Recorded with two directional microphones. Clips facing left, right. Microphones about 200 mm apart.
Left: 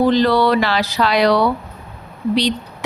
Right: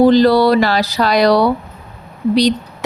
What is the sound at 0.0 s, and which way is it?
Speech, 35° right (ahead or behind).